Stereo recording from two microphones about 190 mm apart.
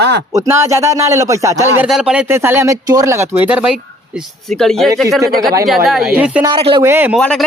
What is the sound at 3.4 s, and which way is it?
Speech, 5° right (ahead or behind).